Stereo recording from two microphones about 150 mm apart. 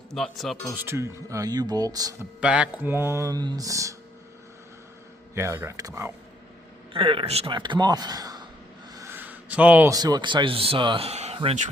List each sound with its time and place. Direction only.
0.1 s speech: centre (ahead or behind)
0.8 s speech: 15° right (ahead or behind)
2.4 s speech: 5° right (ahead or behind)
5.3 s speech: 20° right (ahead or behind)
6.9 s speech: 35° right (ahead or behind)
9.0 s a sound: 15° right (ahead or behind)
9.9 s speech: 25° right (ahead or behind); by 11.3 s 45° right (ahead or behind)